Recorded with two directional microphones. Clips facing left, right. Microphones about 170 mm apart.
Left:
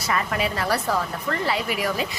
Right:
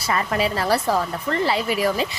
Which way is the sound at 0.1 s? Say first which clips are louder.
Right 3 dB; 30° right (ahead or behind).